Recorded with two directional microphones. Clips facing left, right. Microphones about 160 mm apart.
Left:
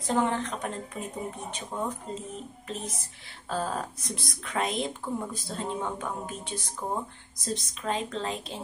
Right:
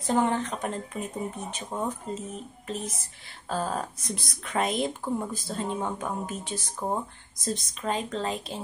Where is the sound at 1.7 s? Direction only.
20° right (ahead or behind).